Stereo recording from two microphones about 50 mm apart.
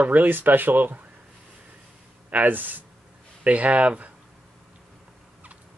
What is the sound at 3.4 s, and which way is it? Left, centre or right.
Speech, right.